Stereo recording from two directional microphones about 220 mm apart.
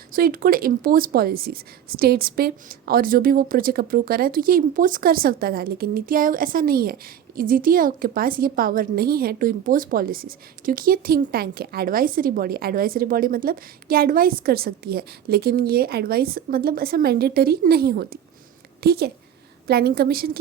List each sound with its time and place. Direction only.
0.1 s a woman's voice: 40° right (ahead or behind)